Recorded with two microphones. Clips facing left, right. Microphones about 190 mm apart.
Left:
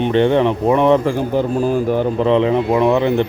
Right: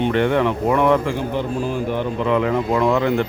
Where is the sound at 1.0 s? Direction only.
40° left (ahead or behind).